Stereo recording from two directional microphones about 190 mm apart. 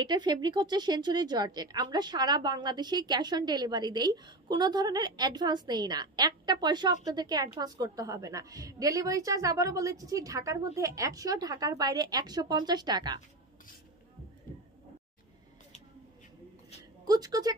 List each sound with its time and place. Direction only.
0.0 s a woman's voice: 20° right (ahead or behind)
17.0 s a woman's voice: 20° right (ahead or behind)